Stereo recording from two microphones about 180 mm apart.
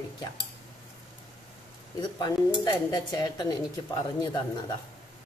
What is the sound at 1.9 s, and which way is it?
Speech, 25° left (ahead or behind).